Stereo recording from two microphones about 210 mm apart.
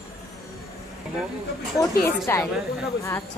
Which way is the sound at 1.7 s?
15° left (ahead or behind).